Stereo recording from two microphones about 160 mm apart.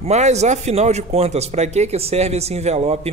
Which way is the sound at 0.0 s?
45° right (ahead or behind).